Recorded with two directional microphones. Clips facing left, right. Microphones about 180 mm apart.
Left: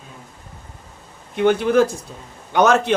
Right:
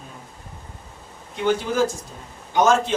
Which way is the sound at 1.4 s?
60° left (ahead or behind).